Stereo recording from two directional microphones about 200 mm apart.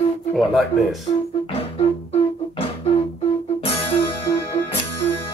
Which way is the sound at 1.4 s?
30° left (ahead or behind).